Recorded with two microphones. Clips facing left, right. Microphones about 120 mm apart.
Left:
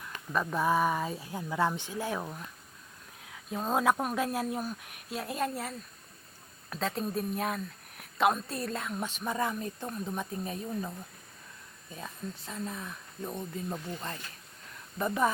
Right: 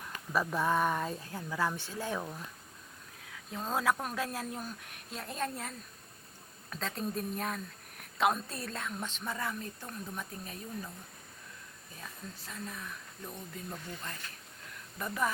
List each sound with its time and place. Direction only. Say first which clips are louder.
0.3 s speech: left 2 dB; 5° left (ahead or behind)
1.3 s speech: left 6 dB; 15° left (ahead or behind)
3.5 s speech: left 4 dB; 20° left (ahead or behind)
12.5 s speech: left 4 dB; 25° left (ahead or behind)